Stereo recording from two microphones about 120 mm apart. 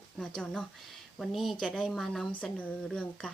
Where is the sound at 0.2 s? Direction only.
5° left (ahead or behind).